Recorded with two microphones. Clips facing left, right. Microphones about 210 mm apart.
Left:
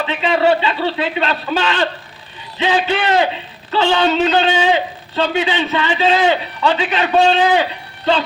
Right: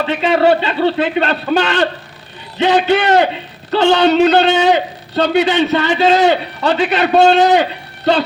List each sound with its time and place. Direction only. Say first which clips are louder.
0.0 s a man's voice: right 3 dB; 45° right (ahead or behind)